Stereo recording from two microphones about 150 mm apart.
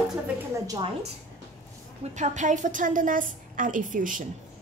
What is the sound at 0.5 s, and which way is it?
Speech, 25° right (ahead or behind).